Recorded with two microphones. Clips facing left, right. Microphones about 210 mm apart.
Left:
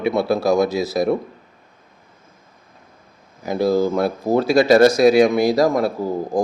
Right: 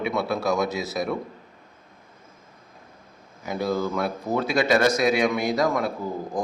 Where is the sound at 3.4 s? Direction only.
35° left (ahead or behind).